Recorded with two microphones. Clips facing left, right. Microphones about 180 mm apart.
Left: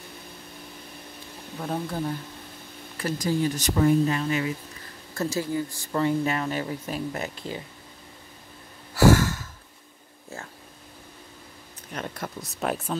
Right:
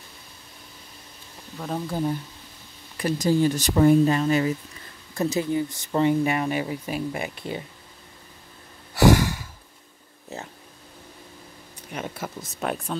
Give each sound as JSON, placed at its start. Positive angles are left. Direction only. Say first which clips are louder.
{"t": 1.6, "sound": "speech", "louder": "right 1 dB", "side_deg": 0}
{"t": 3.0, "sound": "speech", "louder": "right 4 dB", "side_deg": -25}
{"t": 5.1, "sound": "speech", "louder": "right 3 dB", "side_deg": -20}
{"t": 9.0, "sound": "a sound", "louder": "right 1 dB", "side_deg": -15}
{"t": 11.9, "sound": "speech", "louder": "right 1 dB", "side_deg": -5}